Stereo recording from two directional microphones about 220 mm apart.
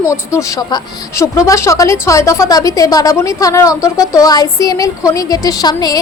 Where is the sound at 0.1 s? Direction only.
15° left (ahead or behind).